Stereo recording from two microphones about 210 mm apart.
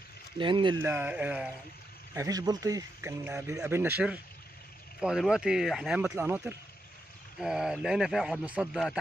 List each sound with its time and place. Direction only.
0.4 s speech: 20° right (ahead or behind)
0.8 s speech: 10° right (ahead or behind)
2.1 s speech: 15° right (ahead or behind)
5.0 s speech: centre (ahead or behind)